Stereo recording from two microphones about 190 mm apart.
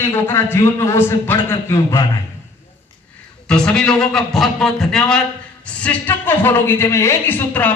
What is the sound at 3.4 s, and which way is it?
A man's voice, 5° left (ahead or behind).